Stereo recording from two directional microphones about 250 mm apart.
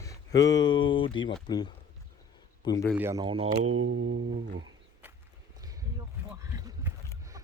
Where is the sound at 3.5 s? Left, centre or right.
Right.